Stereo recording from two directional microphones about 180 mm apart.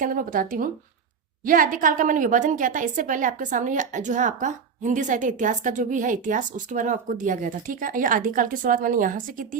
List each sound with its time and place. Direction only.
0.0 s a woman's voice: 50° right (ahead or behind)